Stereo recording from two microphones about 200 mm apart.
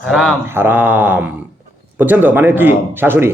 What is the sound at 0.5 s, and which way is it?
A man's voice, 10° right (ahead or behind).